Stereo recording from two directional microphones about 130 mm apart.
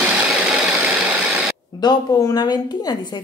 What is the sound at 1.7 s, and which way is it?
A woman's voice, 30° left (ahead or behind).